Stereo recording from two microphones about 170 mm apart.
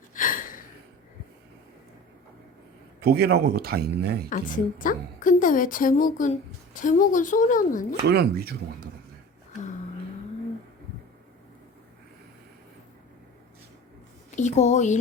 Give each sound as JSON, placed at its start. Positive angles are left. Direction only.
{"t": 0.1, "sound": "a sound", "side_deg": 55}
{"t": 3.0, "sound": "speech", "side_deg": -70}
{"t": 4.3, "sound": "a woman's voice", "side_deg": 50}
{"t": 8.0, "sound": "speech", "side_deg": -75}
{"t": 14.3, "sound": "speech", "side_deg": 45}